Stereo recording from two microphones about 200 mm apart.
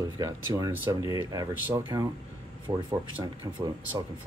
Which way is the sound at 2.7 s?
25° right (ahead or behind).